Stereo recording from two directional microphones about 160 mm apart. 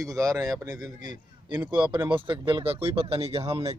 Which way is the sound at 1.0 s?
25° right (ahead or behind).